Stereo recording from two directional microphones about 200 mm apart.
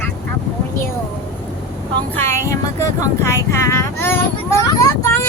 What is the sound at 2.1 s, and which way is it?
Speech, 10° left (ahead or behind).